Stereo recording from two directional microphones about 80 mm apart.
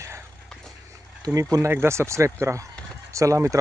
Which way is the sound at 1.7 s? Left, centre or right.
Right.